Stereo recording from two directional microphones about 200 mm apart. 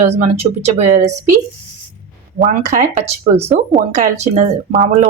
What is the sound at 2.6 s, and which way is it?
Speech, 35° right (ahead or behind).